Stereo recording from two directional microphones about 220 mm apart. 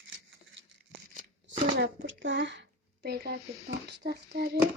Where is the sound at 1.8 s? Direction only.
50° right (ahead or behind).